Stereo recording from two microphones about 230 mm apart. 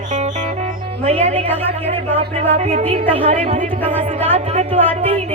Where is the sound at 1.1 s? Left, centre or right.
Right.